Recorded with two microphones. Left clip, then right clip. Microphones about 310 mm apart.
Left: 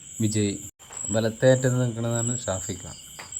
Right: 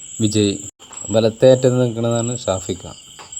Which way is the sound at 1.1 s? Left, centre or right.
Right.